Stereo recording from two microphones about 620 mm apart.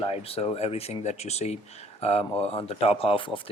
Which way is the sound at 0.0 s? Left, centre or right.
Centre.